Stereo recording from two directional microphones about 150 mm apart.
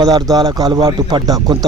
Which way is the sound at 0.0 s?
25° right (ahead or behind).